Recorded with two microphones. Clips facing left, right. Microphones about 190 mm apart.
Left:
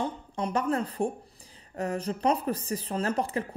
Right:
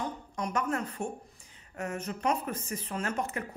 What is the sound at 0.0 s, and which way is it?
Speech, 30° left (ahead or behind).